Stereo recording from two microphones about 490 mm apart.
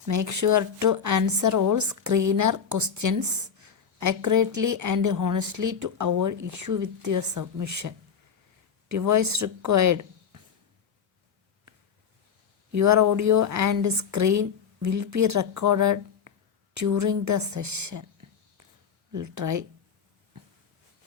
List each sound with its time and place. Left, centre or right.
0.0 s speech: right
12.7 s speech: right
19.1 s speech: right